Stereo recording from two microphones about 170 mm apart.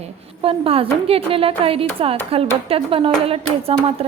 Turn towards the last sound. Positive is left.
turn(degrees=-35)  # may be behind; listen again after turning